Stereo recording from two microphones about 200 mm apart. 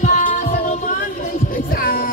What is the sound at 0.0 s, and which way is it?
Music, 35° left (ahead or behind).